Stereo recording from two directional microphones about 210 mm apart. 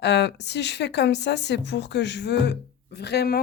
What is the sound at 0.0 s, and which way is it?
Speech, 55° left (ahead or behind).